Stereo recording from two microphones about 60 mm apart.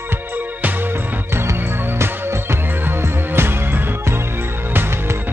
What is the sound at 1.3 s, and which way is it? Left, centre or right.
Music, right.